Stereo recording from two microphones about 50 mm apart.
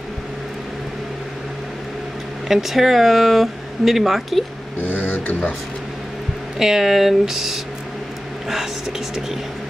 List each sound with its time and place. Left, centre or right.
2.4 s speech: centre
4.8 s a sound: left
6.6 s speech: centre